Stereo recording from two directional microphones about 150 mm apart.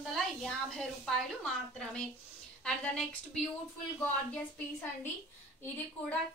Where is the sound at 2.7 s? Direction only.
5° left (ahead or behind).